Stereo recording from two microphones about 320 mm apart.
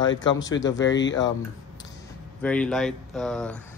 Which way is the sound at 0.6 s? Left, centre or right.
Centre.